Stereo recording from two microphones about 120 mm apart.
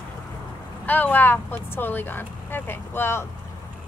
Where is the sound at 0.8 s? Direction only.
15° left (ahead or behind).